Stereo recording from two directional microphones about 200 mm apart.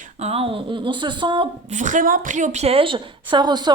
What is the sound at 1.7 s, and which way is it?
A woman's voice, 40° right (ahead or behind).